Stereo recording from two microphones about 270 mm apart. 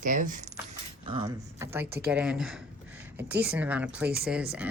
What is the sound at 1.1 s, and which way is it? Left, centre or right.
Speech, centre.